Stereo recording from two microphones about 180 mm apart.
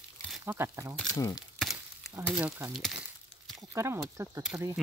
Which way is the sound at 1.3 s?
Centre (ahead or behind).